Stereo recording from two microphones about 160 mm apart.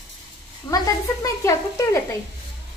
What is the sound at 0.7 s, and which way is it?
Sizzle, 20° left (ahead or behind).